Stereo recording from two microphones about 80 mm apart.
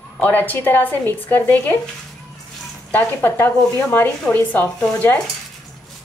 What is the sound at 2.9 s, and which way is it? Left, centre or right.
A woman's voice, left.